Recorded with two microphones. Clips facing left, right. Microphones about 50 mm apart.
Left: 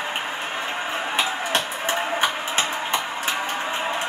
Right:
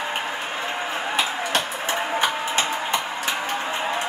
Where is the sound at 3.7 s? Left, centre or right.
Centre.